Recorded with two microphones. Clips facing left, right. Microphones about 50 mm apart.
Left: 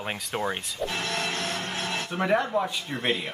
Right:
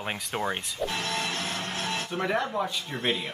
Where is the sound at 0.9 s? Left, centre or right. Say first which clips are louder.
Left 2 dB; left.